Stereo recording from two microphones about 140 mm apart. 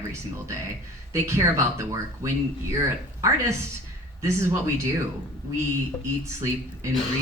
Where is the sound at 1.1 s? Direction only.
20° right (ahead or behind).